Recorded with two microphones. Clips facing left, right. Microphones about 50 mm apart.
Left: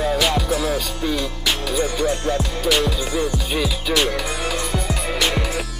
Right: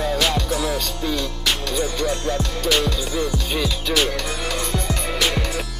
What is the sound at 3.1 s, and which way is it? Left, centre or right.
Music, left.